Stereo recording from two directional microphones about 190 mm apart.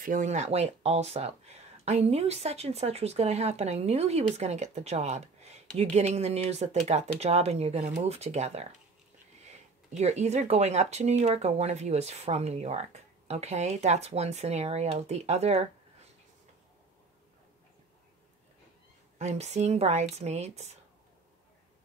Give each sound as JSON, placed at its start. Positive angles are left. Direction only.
{"t": 0.0, "sound": "speech", "side_deg": -40}
{"t": 19.1, "sound": "speech", "side_deg": -35}